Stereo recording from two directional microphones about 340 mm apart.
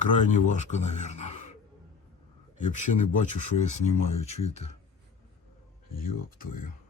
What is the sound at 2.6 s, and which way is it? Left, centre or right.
Speech, left.